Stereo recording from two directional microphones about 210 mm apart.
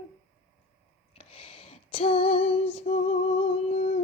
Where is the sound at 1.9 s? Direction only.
25° left (ahead or behind).